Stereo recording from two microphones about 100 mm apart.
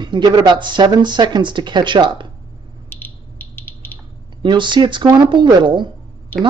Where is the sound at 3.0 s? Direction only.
20° left (ahead or behind).